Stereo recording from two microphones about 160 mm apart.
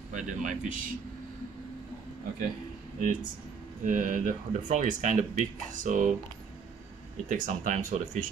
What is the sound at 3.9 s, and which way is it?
Speech, 55° right (ahead or behind).